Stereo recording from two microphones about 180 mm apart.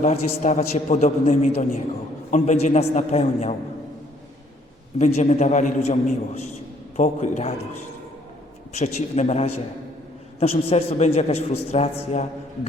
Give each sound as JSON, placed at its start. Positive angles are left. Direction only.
{"t": 0.0, "sound": "a man's voice", "side_deg": 40}
{"t": 4.9, "sound": "a man's voice", "side_deg": 40}
{"t": 8.8, "sound": "a man's voice", "side_deg": 35}